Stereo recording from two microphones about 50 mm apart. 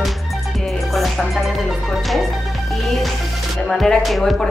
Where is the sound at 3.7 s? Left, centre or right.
Centre.